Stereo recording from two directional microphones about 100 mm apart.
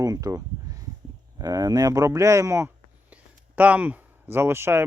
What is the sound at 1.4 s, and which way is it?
Speech, 40° right (ahead or behind).